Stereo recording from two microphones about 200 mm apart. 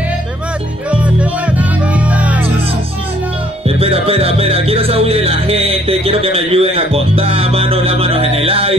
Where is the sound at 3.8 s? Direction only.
30° right (ahead or behind).